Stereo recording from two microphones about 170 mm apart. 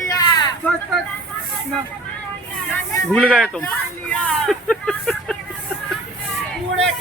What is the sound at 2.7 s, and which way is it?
Speech, 5° left (ahead or behind).